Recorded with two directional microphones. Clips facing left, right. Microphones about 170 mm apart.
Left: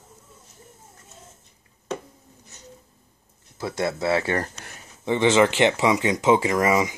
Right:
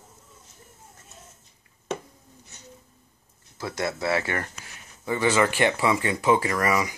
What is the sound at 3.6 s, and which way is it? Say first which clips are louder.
Speech: left 3 dB; 25° left (ahead or behind).